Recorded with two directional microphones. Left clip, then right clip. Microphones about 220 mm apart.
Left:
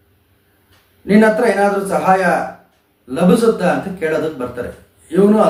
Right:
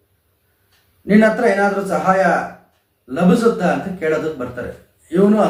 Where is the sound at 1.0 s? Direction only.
5° left (ahead or behind).